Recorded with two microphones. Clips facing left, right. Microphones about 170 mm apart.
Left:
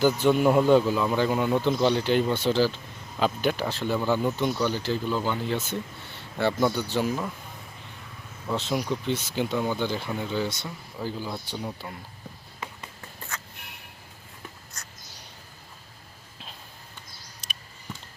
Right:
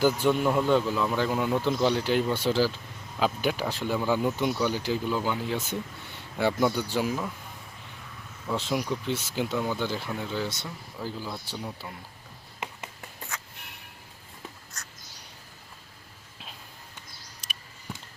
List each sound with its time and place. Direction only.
0.0 s speech: 5° right (ahead or behind)
0.4 s speech: 15° left (ahead or behind)
0.9 s speech: 5° left (ahead or behind)
8.5 s speech: 5° right (ahead or behind)
12.5 s a sound: 15° right (ahead or behind)